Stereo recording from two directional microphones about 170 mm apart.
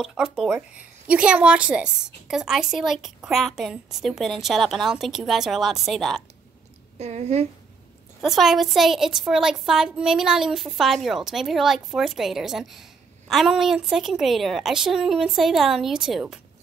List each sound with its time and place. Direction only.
0.0 s a woman's voice: centre (ahead or behind)
7.0 s a woman's voice: 40° right (ahead or behind)
8.2 s a woman's voice: centre (ahead or behind)